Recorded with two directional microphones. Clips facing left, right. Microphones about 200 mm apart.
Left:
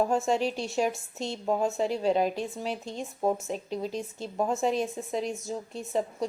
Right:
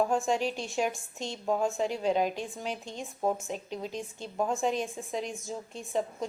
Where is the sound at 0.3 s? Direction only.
40° left (ahead or behind).